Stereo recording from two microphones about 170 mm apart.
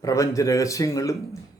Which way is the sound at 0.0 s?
20° left (ahead or behind).